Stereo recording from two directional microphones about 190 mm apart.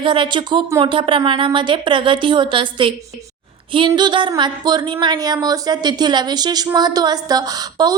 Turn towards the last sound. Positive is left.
turn(degrees=-20)  # may be behind; listen again after turning